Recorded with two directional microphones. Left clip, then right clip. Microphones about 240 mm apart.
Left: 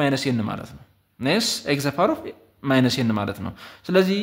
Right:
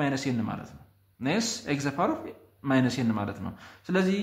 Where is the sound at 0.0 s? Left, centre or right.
Left.